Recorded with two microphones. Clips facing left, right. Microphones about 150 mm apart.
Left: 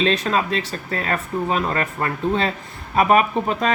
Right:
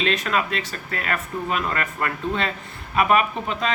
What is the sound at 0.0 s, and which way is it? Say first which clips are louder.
Speech: left 3 dB; 35° left (ahead or behind).